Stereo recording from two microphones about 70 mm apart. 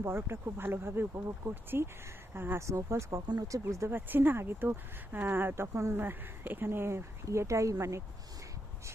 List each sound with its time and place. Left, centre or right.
0.0 s speech: right
3.2 s speech: right
3.6 s speech: right
3.9 s speech: right